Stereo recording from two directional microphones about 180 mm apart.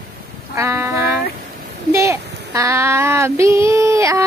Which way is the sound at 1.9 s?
15° right (ahead or behind).